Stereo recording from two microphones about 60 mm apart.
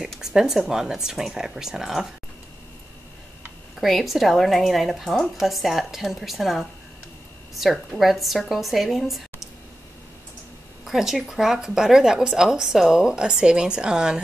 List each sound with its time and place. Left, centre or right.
0.2 s a woman's voice: centre
3.8 s a woman's voice: centre
10.9 s a woman's voice: centre